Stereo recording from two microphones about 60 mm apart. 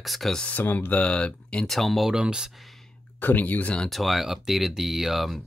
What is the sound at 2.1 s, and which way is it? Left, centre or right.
Speech, centre.